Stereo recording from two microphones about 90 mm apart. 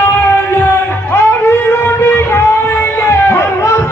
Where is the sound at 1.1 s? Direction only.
25° left (ahead or behind).